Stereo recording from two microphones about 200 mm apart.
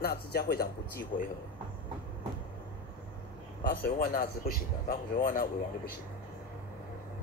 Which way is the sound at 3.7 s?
45° left (ahead or behind).